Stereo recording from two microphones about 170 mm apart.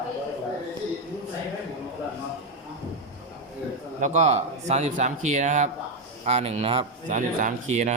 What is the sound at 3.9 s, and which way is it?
Speech, 45° right (ahead or behind).